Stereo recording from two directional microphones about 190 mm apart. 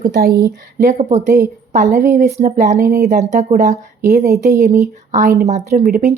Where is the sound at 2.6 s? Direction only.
55° right (ahead or behind).